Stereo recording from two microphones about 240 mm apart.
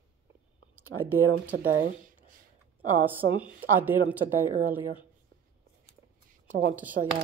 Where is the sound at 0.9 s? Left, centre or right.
Right.